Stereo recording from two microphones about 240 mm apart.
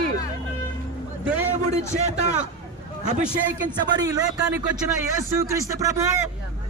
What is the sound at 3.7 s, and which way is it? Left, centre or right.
Speech, centre.